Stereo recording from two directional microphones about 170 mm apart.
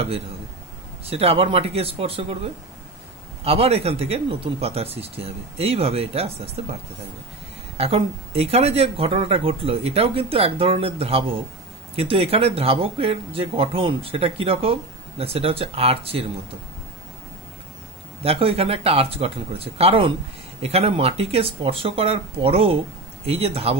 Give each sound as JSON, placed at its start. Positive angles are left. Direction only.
{"t": 1.0, "sound": "speech", "side_deg": -35}
{"t": 3.4, "sound": "speech", "side_deg": -35}
{"t": 18.2, "sound": "speech", "side_deg": -35}